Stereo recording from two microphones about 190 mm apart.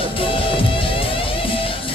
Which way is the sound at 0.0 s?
30° left (ahead or behind).